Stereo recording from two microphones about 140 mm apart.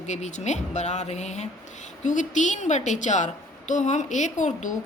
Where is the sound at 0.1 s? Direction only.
55° left (ahead or behind).